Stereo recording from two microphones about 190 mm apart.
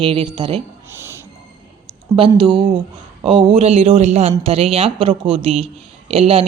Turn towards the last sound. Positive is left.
turn(degrees=-30)  # may be behind; listen again after turning